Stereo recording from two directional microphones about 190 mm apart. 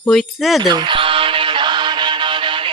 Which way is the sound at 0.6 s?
25° right (ahead or behind).